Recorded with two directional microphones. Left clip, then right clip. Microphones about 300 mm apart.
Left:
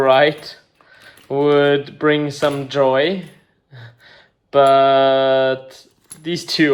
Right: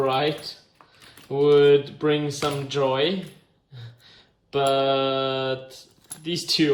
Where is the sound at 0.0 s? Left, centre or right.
Centre.